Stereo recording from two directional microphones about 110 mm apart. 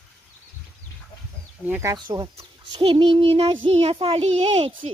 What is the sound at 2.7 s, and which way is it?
A child's voice, 50° right (ahead or behind).